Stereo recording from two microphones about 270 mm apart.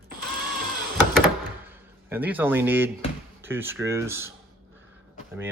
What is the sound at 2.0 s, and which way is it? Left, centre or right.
Speech, centre.